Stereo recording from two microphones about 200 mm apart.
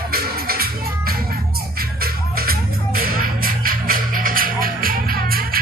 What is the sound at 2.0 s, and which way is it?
Music, 50° right (ahead or behind).